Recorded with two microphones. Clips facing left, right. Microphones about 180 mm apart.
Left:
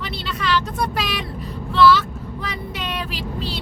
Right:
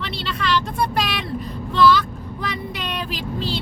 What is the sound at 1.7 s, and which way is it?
Vehicle, 5° left (ahead or behind).